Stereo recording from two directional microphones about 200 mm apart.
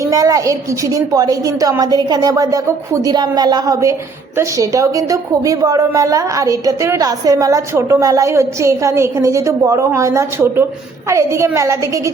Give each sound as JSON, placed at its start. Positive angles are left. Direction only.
{"t": 0.0, "sound": "a woman's voice", "side_deg": -15}